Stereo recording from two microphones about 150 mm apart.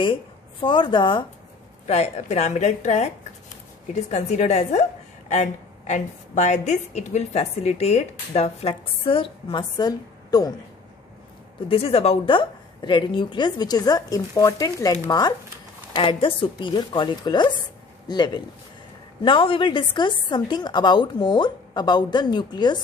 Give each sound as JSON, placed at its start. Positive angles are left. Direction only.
{"t": 0.0, "sound": "speech", "side_deg": 35}
{"t": 1.9, "sound": "a woman's voice", "side_deg": 45}
{"t": 11.7, "sound": "a woman's voice", "side_deg": 40}